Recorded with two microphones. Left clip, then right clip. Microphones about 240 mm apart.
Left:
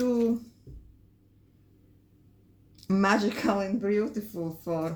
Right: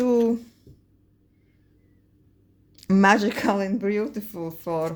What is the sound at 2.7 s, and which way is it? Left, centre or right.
Speech, right.